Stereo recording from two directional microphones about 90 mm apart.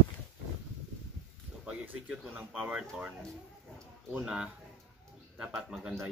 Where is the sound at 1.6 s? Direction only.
10° right (ahead or behind).